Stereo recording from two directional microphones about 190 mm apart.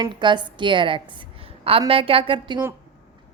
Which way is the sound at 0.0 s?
25° right (ahead or behind).